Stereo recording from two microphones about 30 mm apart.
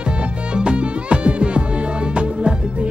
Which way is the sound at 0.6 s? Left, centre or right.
Right.